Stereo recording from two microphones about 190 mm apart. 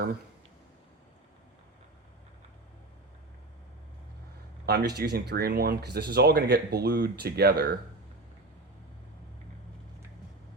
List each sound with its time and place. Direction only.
4.6 s speech: 60° right (ahead or behind)